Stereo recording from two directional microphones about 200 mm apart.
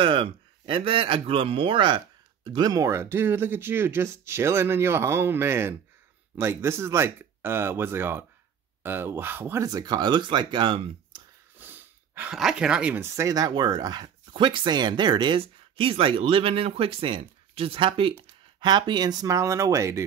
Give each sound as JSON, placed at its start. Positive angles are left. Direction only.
{"t": 0.0, "sound": "speech", "side_deg": -25}
{"t": 11.5, "sound": "speech", "side_deg": -10}